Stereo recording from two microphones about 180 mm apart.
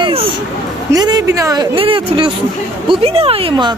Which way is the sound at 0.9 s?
20° right (ahead or behind).